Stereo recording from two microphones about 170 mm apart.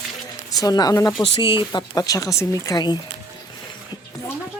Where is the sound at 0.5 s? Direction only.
20° left (ahead or behind).